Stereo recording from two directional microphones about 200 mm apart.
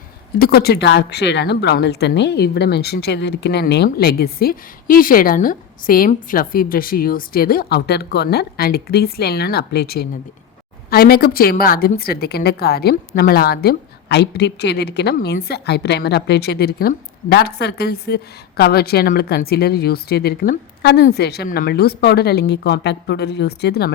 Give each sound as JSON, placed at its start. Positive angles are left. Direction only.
{"t": 0.3, "sound": "a woman's voice", "side_deg": 50}